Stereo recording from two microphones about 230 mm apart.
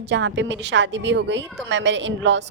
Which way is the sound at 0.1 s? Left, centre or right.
Right.